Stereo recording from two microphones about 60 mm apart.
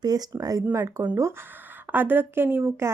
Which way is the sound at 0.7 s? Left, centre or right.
Right.